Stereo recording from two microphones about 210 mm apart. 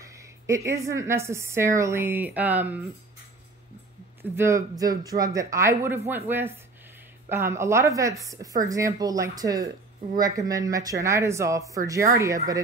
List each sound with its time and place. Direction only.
0.0 s a woman's voice: 15° right (ahead or behind)
4.2 s a woman's voice: 10° right (ahead or behind)